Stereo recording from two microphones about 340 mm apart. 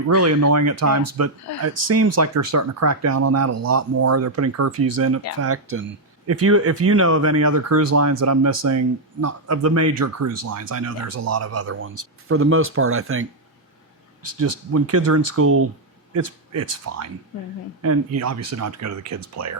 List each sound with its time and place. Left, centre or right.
0.2 s speech: right
14.3 s speech: right